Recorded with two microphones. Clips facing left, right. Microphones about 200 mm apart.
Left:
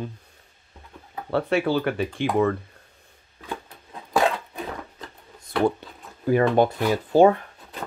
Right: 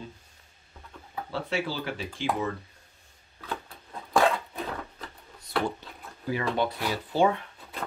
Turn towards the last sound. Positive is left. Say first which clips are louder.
# left 8 dB
turn(degrees=45)  # may be behind; listen again after turning